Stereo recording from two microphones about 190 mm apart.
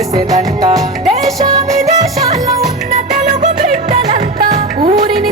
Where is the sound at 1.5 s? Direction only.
35° right (ahead or behind).